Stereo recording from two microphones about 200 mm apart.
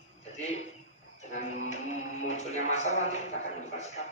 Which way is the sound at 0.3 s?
35° left (ahead or behind).